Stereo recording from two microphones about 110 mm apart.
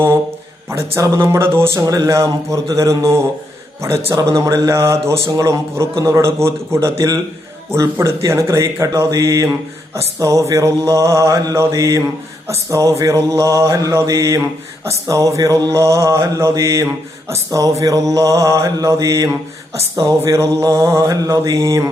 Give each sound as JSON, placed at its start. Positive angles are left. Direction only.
{"t": 0.7, "sound": "mantra", "side_deg": -25}
{"t": 3.8, "sound": "a man's voice", "side_deg": -25}
{"t": 4.1, "sound": "mantra", "side_deg": -30}